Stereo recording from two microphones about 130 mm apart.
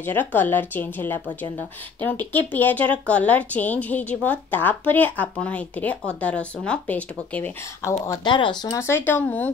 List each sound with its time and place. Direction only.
0.0 s speech: 15° left (ahead or behind)
8.1 s speech: 35° left (ahead or behind)
8.7 s speech: 20° left (ahead or behind)